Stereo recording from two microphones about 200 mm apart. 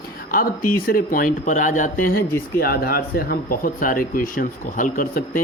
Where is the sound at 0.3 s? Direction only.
45° left (ahead or behind).